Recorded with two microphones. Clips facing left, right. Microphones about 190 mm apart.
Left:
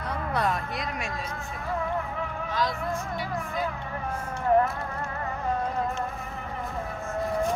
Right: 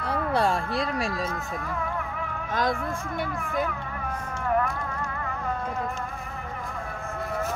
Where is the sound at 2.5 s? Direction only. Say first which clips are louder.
Right 3 dB; 50° right (ahead or behind).